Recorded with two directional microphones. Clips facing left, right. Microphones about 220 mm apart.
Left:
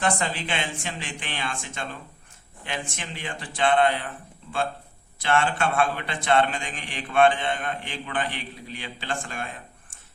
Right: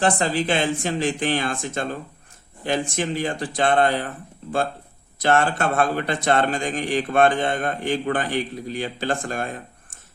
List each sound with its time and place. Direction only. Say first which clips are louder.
0.0 s a man's voice: right 6 dB; 35° right (ahead or behind)
5.2 s a man's voice: right 4 dB; 40° right (ahead or behind)